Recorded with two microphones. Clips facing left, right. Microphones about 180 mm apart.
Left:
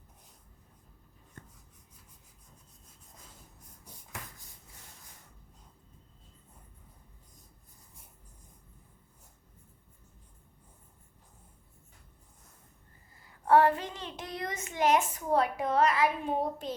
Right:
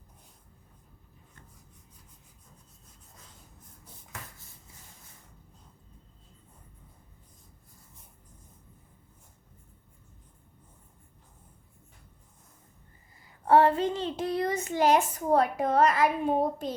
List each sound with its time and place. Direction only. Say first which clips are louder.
13.5 s child singing: right 2 dB; 25° right (ahead or behind); by 16.7 s 45° right (ahead or behind)